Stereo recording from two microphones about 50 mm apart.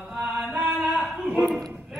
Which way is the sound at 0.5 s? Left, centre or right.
Right.